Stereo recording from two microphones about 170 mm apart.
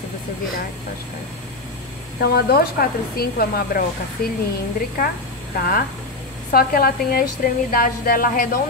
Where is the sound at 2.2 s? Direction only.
65° left (ahead or behind).